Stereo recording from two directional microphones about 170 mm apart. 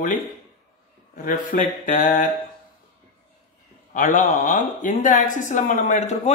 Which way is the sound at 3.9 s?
50° left (ahead or behind).